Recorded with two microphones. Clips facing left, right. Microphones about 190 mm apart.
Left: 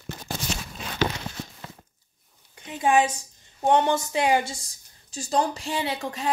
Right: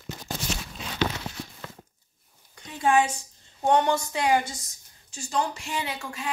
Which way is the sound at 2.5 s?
20° left (ahead or behind).